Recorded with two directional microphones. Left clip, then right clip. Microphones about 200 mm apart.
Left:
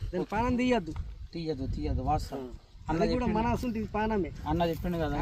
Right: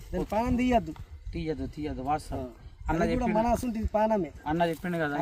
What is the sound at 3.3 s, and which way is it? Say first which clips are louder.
Speech: right 4 dB; 40° right (ahead or behind).